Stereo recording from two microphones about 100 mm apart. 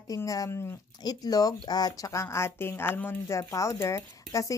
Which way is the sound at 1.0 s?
40° left (ahead or behind).